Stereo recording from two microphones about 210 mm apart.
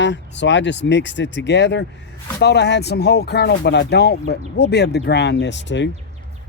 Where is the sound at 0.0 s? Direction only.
60° left (ahead or behind).